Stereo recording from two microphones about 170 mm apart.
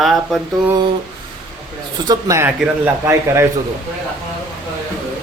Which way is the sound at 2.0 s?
15° right (ahead or behind).